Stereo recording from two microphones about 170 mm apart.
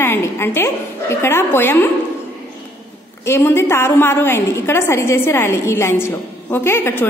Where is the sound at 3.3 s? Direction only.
15° left (ahead or behind).